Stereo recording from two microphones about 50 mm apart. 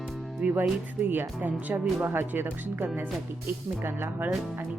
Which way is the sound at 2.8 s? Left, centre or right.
Right.